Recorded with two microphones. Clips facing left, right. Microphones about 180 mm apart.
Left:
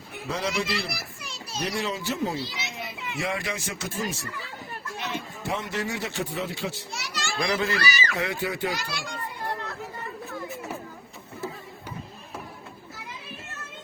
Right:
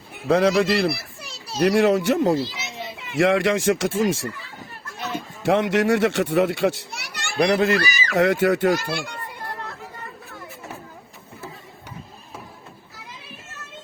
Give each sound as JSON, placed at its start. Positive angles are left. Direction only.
{"t": 0.3, "sound": "speech", "side_deg": -65}
{"t": 1.2, "sound": "children playing", "side_deg": -35}
{"t": 1.5, "sound": "a child's voice", "side_deg": -70}
{"t": 4.9, "sound": "children playing", "side_deg": -40}
{"t": 5.5, "sound": "a child's voice", "side_deg": -90}
{"t": 8.6, "sound": "speech", "side_deg": -50}